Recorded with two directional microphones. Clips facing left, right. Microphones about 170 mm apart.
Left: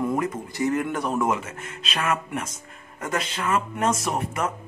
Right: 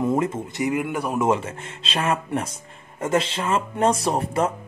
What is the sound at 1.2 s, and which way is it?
Speech, 30° right (ahead or behind).